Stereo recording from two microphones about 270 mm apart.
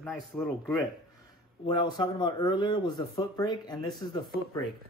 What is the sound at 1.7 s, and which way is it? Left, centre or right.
Speech, centre.